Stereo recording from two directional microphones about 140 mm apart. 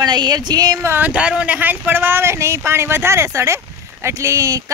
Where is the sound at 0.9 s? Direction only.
10° right (ahead or behind).